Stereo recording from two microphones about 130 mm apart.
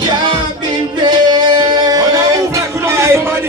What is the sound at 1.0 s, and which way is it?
Music, 35° right (ahead or behind).